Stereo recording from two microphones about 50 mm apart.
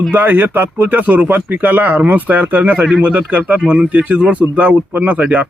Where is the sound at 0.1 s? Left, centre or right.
Right.